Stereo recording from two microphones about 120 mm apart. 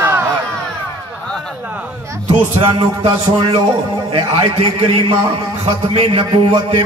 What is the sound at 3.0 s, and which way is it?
A man's voice, 55° right (ahead or behind).